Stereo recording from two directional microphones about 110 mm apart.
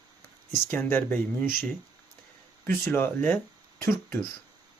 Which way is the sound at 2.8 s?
20° left (ahead or behind).